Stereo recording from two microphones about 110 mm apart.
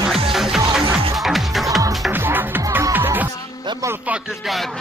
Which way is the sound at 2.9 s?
15° right (ahead or behind).